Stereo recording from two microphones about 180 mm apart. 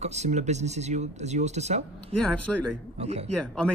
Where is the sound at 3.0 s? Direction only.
35° right (ahead or behind).